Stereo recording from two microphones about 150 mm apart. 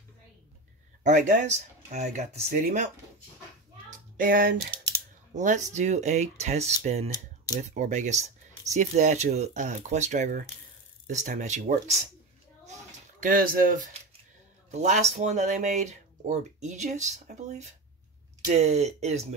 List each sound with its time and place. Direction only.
1.0 s speech: 55° right (ahead or behind)
3.9 s a sound: 65° right (ahead or behind)
5.3 s speech: 55° right (ahead or behind)
13.2 s speech: 70° right (ahead or behind)
14.7 s speech: 50° right (ahead or behind)